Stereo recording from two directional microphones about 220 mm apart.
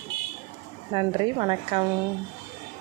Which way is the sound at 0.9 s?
20° right (ahead or behind).